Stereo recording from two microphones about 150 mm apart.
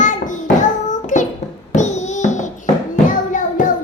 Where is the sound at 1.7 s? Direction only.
50° left (ahead or behind).